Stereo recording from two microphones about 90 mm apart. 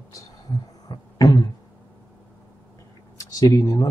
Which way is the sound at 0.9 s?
45° left (ahead or behind).